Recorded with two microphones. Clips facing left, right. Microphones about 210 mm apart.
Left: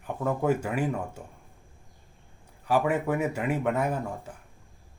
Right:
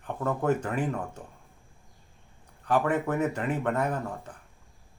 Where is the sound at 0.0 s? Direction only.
10° left (ahead or behind).